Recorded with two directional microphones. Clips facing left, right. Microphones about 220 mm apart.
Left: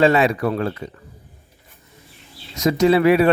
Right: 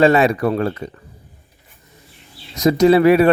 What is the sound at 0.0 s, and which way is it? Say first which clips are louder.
Speech: right 2 dB; 45° right (ahead or behind).